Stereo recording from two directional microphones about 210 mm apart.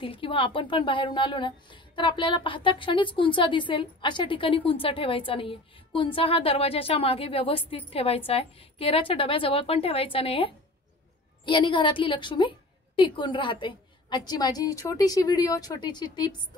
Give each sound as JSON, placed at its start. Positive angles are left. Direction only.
{"t": 0.0, "sound": "a woman's voice", "side_deg": 25}